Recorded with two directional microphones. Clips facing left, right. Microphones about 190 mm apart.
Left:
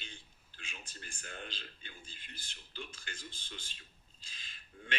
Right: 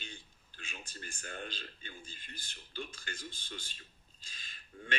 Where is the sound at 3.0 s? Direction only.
45° right (ahead or behind).